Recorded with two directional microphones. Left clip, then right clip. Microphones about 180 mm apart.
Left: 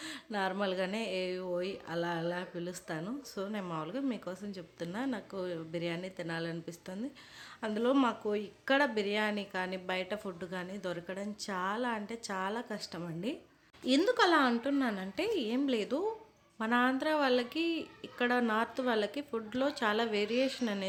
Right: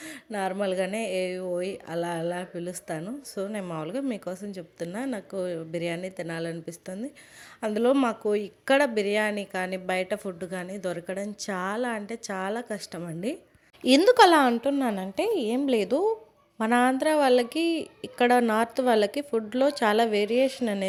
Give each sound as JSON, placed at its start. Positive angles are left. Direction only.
{"t": 0.0, "sound": "speech", "side_deg": -20}
{"t": 13.8, "sound": "a woman's voice", "side_deg": -40}
{"t": 14.5, "sound": "a woman's voice", "side_deg": -25}